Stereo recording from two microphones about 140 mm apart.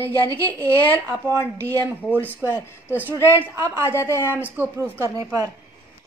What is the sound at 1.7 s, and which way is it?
A woman's voice, 10° left (ahead or behind).